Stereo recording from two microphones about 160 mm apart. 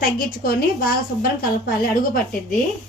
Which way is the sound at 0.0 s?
65° left (ahead or behind).